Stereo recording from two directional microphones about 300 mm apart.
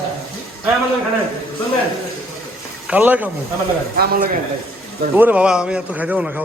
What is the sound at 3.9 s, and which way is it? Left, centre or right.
Speech, right.